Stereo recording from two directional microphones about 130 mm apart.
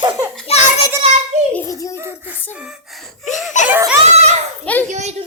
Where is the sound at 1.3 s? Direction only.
60° right (ahead or behind).